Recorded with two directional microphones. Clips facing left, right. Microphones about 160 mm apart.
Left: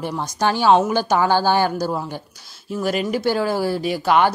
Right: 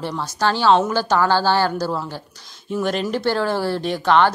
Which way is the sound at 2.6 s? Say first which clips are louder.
Even; 5° left (ahead or behind).